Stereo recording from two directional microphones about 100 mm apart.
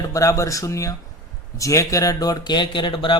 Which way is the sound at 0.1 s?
30° left (ahead or behind).